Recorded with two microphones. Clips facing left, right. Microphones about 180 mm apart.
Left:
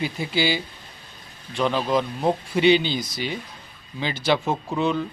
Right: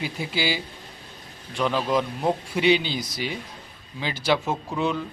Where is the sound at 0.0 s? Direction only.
5° right (ahead or behind).